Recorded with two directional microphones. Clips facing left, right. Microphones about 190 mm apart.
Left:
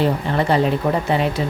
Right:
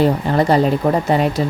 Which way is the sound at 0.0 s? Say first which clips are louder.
Right 4 dB; 40° right (ahead or behind).